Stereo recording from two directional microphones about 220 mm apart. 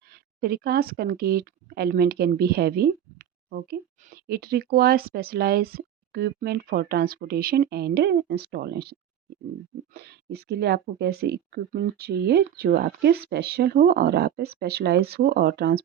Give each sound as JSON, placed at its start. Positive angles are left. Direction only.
{"t": 0.1, "sound": "speech", "side_deg": -45}